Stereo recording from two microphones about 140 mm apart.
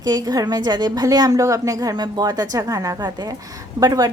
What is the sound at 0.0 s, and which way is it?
A woman's voice, 30° right (ahead or behind).